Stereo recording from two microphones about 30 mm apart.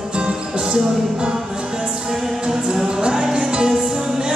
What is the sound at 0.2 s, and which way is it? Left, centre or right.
Music, right.